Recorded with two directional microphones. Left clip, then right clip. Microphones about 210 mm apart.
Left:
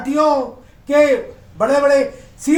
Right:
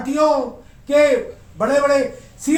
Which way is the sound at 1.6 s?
35° left (ahead or behind).